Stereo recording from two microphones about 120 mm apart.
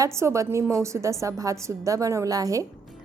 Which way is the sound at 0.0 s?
25° right (ahead or behind).